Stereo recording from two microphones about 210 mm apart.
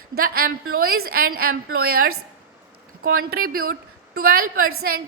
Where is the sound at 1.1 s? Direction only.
45° right (ahead or behind).